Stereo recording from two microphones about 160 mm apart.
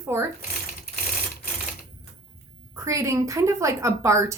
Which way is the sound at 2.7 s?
20° right (ahead or behind).